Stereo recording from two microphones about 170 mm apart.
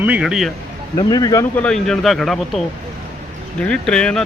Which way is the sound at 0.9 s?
20° left (ahead or behind).